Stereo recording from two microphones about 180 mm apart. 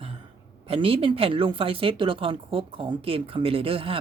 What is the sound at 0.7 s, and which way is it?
A woman's voice, 30° right (ahead or behind).